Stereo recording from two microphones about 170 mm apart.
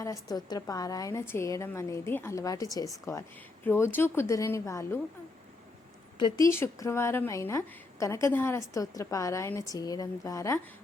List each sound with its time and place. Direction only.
0.0 s a woman's voice: 20° left (ahead or behind)
6.1 s a woman's voice: 25° left (ahead or behind)
6.5 s a woman's voice: 15° left (ahead or behind)